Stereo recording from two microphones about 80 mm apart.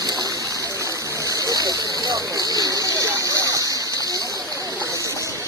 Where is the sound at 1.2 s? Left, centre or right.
Right.